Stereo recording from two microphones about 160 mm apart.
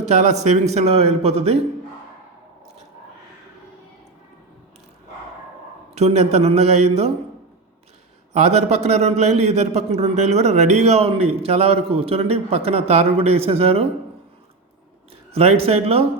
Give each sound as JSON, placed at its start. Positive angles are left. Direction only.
{"t": 0.0, "sound": "a man's voice", "side_deg": -45}
{"t": 5.9, "sound": "a man's voice", "side_deg": -40}
{"t": 8.3, "sound": "a man's voice", "side_deg": -45}
{"t": 15.3, "sound": "a man's voice", "side_deg": -40}